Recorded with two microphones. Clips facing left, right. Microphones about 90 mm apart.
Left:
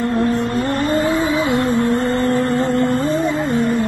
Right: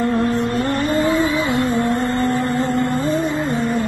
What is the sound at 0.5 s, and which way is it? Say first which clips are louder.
Music: left 1 dB; 25° left (ahead or behind).